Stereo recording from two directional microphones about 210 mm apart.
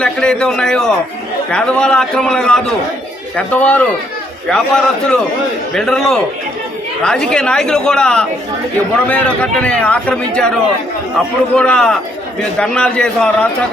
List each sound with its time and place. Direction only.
0.0 s a man's voice: 5° left (ahead or behind)
11.5 s a man's voice: 5° left (ahead or behind)